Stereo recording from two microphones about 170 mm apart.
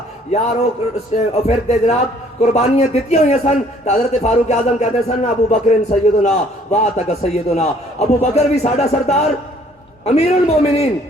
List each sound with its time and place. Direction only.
0.3 s a man's voice: 40° left (ahead or behind)